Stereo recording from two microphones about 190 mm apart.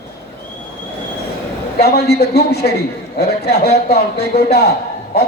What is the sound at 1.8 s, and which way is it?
A man's voice, 55° left (ahead or behind).